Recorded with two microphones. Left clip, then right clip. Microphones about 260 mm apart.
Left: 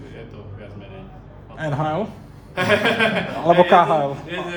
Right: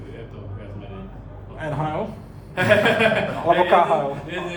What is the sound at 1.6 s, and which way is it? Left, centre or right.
Speech, left.